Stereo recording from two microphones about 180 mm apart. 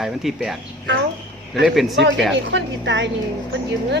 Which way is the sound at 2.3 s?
80° right.